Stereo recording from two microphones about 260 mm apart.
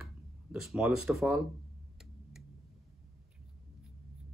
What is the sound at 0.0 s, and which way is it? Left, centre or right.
Speech, centre.